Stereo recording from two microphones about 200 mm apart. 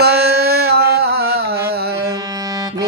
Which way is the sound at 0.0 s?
55° right (ahead or behind).